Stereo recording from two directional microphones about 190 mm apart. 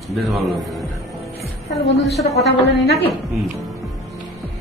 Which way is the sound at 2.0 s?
Centre (ahead or behind).